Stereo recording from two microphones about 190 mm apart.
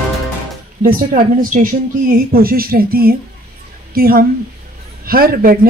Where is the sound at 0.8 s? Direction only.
50° right (ahead or behind).